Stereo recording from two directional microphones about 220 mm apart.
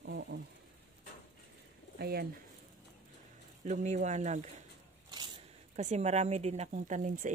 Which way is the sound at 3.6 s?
30° right (ahead or behind).